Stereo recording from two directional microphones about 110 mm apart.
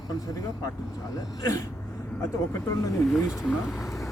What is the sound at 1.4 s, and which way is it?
Speech, 30° left (ahead or behind).